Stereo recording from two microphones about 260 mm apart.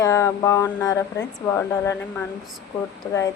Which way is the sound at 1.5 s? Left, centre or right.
Centre.